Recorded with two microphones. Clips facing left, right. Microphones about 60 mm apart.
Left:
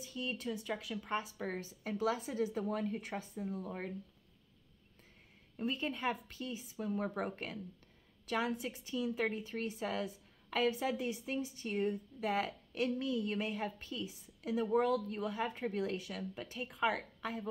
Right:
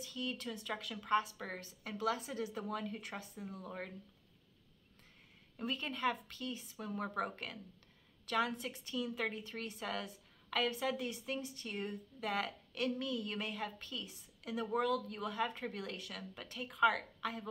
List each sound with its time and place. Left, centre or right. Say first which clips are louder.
0.0 s speech: left 2 dB; centre
5.6 s speech: left 1 dB; centre